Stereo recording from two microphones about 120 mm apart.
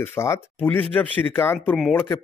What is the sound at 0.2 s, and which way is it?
Speech, 20° left (ahead or behind).